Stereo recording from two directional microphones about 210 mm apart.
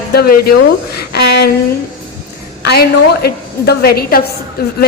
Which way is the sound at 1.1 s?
50° left (ahead or behind).